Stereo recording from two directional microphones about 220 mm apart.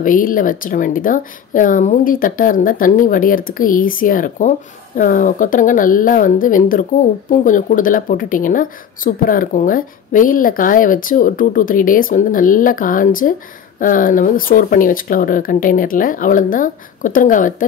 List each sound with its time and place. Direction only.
0.0 s speech: 40° left (ahead or behind)